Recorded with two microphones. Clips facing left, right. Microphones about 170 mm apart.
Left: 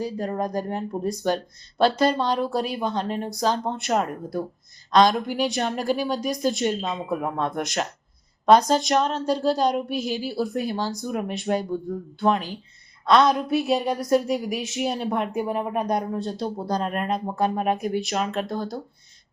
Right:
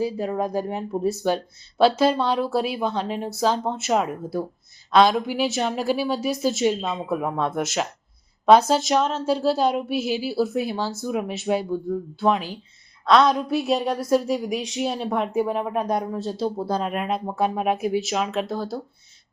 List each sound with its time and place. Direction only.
0.0 s a woman's voice: 5° right (ahead or behind)